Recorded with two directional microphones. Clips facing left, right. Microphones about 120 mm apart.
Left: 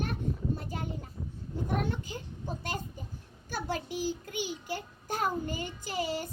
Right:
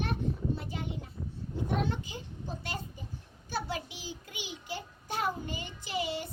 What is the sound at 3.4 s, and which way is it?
A child's voice, 50° left (ahead or behind).